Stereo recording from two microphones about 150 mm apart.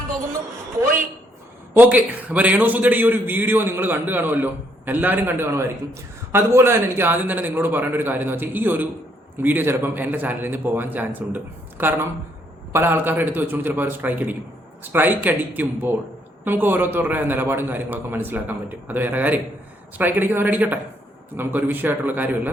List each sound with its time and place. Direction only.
1.7 s a man's voice: 10° right (ahead or behind)